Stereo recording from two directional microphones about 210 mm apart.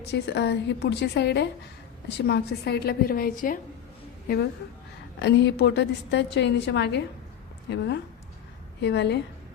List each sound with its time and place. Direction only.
0.0 s a woman's voice: 50° left (ahead or behind)
5.2 s a woman's voice: 55° left (ahead or behind)